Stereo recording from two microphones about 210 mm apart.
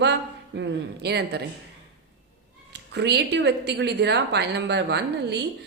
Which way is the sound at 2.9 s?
55° right (ahead or behind).